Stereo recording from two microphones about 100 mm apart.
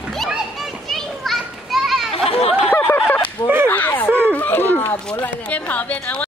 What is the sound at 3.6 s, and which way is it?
Speech, 15° left (ahead or behind).